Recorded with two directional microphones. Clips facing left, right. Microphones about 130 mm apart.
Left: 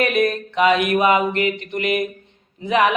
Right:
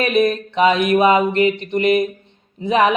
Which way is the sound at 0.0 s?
25° right (ahead or behind).